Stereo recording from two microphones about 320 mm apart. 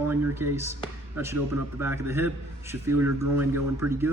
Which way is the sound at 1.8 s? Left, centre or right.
Centre.